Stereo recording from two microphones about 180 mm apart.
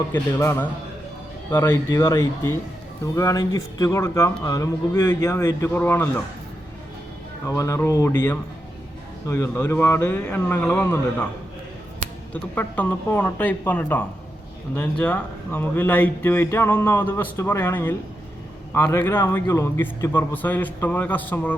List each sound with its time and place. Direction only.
0.1 s a man's voice: 15° left (ahead or behind)
7.4 s a man's voice: 20° left (ahead or behind)
12.3 s a man's voice: 10° left (ahead or behind)